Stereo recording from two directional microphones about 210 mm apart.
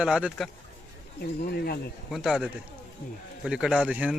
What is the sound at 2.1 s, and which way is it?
A man's voice, centre (ahead or behind).